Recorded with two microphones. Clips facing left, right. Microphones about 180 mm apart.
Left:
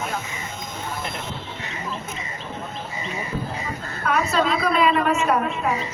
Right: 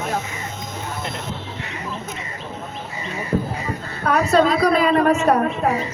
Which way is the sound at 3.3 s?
50° right (ahead or behind).